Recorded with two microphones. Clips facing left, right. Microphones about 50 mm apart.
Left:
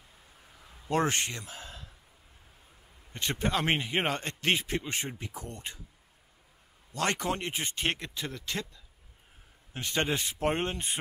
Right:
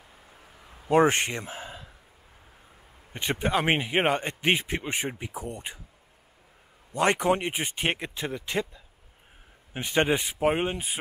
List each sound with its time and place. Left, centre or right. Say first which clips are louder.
0.6 s a sound: right 8 dB; centre
3.1 s a man's voice: right 4 dB; centre
6.9 s a man's voice: right 7 dB; centre